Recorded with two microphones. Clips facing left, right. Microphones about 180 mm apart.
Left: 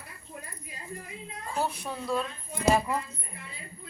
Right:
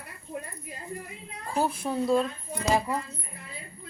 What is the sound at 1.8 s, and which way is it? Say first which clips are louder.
Speech: right 6 dB; 30° right (ahead or behind).